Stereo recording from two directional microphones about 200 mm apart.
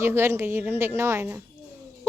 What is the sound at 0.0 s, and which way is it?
Speech, 10° right (ahead or behind).